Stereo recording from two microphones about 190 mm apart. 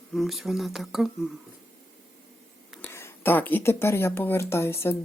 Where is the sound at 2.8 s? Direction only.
10° left (ahead or behind).